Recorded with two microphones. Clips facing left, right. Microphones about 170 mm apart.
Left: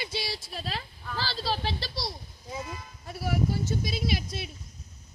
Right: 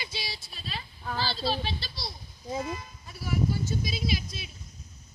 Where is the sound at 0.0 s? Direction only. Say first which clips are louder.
Left 5 dB; 70° left (ahead or behind).